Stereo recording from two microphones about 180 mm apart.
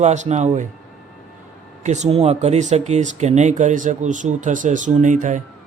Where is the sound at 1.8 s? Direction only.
40° right (ahead or behind).